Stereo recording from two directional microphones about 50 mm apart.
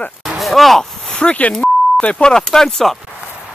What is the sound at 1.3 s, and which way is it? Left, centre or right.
Speech, left.